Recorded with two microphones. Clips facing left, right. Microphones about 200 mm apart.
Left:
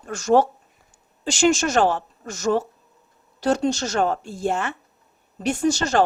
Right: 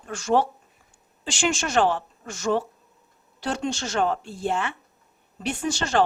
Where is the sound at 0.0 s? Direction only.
40° left (ahead or behind).